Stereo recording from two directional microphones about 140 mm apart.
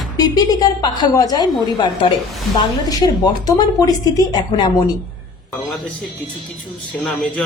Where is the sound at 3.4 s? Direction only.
25° left (ahead or behind).